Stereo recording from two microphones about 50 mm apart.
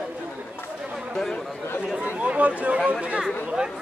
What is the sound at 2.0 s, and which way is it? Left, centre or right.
Chatter, right.